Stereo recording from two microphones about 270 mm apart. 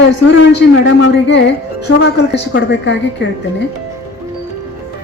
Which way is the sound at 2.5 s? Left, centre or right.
Left.